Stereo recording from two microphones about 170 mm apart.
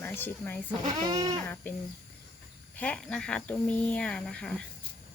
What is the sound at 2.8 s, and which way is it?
Speech, 5° left (ahead or behind).